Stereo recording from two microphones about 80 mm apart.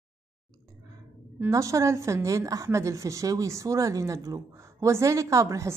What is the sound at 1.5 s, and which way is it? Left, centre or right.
A woman's voice, right.